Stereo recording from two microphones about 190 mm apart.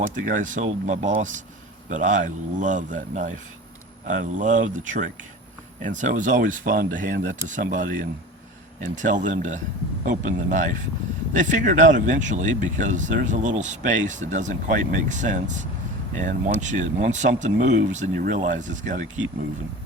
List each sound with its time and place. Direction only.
0.1 s a man's voice: 45° right (ahead or behind)